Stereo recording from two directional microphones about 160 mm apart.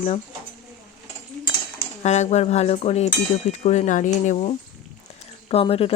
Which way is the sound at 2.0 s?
45° left (ahead or behind).